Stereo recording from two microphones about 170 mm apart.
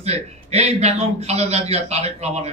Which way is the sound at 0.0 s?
40° right (ahead or behind).